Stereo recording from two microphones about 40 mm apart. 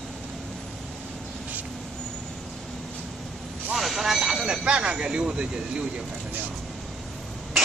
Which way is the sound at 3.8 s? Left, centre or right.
Centre.